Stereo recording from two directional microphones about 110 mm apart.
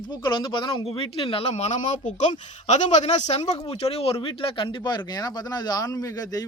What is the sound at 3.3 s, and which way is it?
Speech, 75° left (ahead or behind).